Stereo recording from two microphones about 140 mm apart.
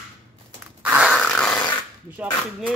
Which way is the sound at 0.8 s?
10° right (ahead or behind).